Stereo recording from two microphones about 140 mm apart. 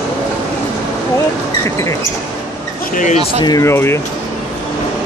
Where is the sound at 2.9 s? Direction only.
65° left (ahead or behind).